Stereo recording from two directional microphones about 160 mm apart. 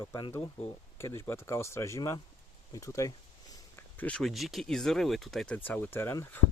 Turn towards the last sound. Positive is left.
turn(degrees=15)  # may be behind; listen again after turning